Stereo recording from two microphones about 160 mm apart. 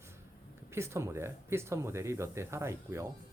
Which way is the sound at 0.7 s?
15° right (ahead or behind).